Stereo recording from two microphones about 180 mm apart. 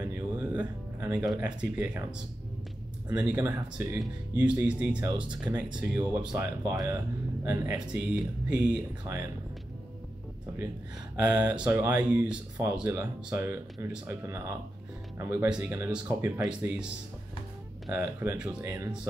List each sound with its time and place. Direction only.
0.0 s music: 15° right (ahead or behind)
3.3 s speech: 15° right (ahead or behind)
3.9 s speech: 5° right (ahead or behind)
11.5 s speech: 10° right (ahead or behind)